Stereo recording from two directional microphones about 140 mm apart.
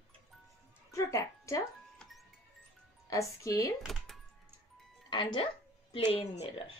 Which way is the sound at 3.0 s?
20° left (ahead or behind).